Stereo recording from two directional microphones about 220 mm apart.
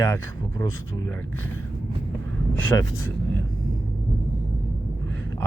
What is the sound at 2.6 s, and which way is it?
Speech, 10° left (ahead or behind).